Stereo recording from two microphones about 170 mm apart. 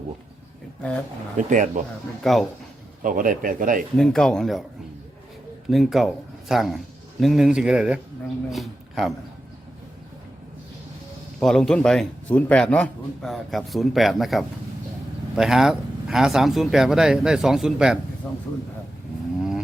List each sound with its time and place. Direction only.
1.4 s speech: 45° right (ahead or behind)
2.2 s a man's voice: centre (ahead or behind)
3.0 s speech: 55° right (ahead or behind)
3.9 s a man's voice: 5° left (ahead or behind)
5.6 s a man's voice: centre (ahead or behind)
11.3 s a man's voice: 5° left (ahead or behind)